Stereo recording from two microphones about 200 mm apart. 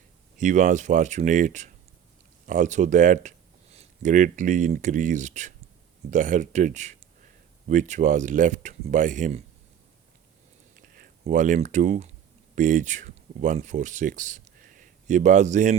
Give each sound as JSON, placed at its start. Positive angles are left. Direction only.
{"t": 0.3, "sound": "speech", "side_deg": -40}
{"t": 10.8, "sound": "a sound", "side_deg": -45}
{"t": 11.2, "sound": "speech", "side_deg": -40}